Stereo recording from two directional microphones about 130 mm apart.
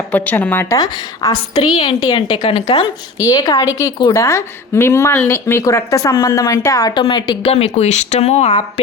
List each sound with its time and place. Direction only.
0.1 s a woman's voice: 15° left (ahead or behind)
0.8 s a woman's voice: 30° left (ahead or behind)
1.5 s a woman's voice: 45° left (ahead or behind)
2.0 s a woman's voice: 35° left (ahead or behind)
3.2 s a woman's voice: 30° left (ahead or behind)
7.4 s speech: 55° left (ahead or behind)